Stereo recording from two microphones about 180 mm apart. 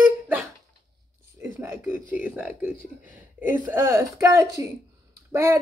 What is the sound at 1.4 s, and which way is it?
Speech, 10° right (ahead or behind).